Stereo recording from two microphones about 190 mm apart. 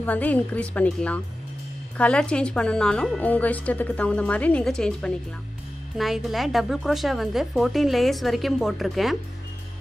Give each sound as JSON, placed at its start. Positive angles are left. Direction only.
{"t": 0.0, "sound": "a woman's voice", "side_deg": 10}